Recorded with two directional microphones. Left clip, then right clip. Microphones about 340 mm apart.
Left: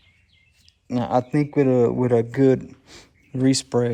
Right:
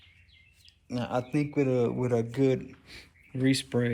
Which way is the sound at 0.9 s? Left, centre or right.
Left.